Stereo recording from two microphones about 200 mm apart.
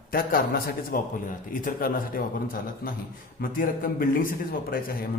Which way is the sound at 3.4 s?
45° left (ahead or behind).